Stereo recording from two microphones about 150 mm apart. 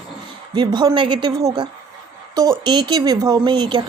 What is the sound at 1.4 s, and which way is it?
Speech, 25° right (ahead or behind).